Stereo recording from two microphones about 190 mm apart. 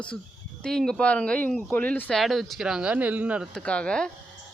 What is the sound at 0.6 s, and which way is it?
Speech, 5° left (ahead or behind).